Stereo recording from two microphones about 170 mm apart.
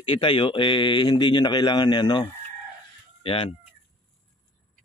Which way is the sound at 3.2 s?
30° left (ahead or behind).